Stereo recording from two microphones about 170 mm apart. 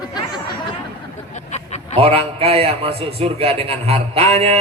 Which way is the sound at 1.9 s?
35° right (ahead or behind).